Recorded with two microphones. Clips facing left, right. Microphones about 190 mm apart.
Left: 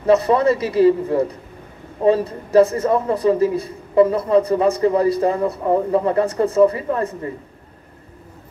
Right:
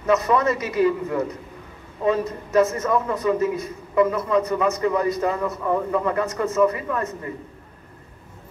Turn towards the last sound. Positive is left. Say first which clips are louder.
# left 4 dB
turn(degrees=30)  # may be behind; listen again after turning